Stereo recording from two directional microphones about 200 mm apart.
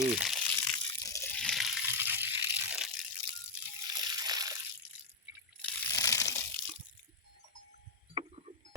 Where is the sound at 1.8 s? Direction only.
10° right (ahead or behind).